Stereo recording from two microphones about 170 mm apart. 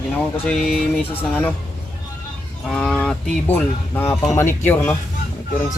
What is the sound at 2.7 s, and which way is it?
Speech, 5° left (ahead or behind).